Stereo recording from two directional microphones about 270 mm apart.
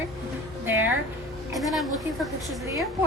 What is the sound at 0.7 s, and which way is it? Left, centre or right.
A woman's voice, centre.